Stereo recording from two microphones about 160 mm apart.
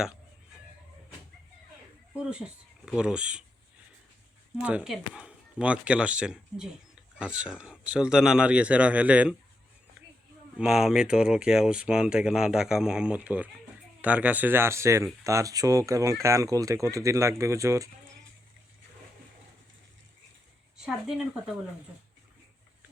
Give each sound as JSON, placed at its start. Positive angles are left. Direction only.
{"t": 2.8, "sound": "speech", "side_deg": -5}
{"t": 4.5, "sound": "speech", "side_deg": -10}
{"t": 10.6, "sound": "speech", "side_deg": -5}
{"t": 20.8, "sound": "speech", "side_deg": -5}